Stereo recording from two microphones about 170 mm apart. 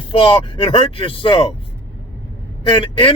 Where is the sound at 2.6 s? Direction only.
30° left (ahead or behind).